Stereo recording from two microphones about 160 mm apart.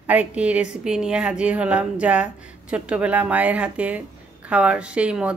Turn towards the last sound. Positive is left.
turn(degrees=-5)  # may be behind; listen again after turning